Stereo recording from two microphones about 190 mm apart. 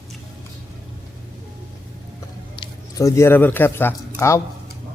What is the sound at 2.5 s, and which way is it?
Speech, 20° left (ahead or behind).